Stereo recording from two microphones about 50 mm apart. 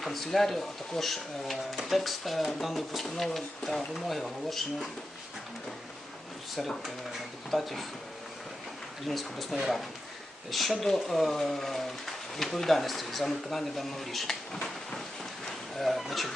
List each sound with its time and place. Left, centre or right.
0.0 s speech: centre
6.6 s speech: centre
9.0 s speech: centre
15.8 s speech: centre